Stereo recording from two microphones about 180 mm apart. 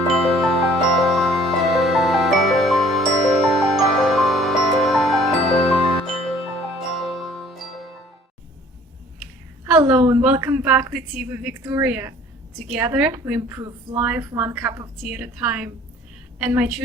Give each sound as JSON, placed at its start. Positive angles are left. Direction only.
{"t": 0.1, "sound": "music", "side_deg": 0}
{"t": 10.1, "sound": "a sound", "side_deg": -10}
{"t": 10.4, "sound": "a woman's voice", "side_deg": -10}